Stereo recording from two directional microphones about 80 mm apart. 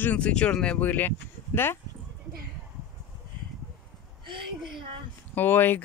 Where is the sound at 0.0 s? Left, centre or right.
Centre.